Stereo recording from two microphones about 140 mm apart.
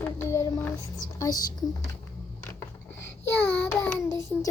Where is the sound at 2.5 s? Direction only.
15° left (ahead or behind).